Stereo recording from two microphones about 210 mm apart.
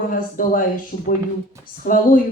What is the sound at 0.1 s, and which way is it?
Speech, 40° left (ahead or behind).